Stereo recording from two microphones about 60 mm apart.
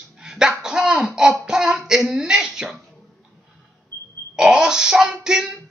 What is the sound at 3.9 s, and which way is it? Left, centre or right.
Grunt, right.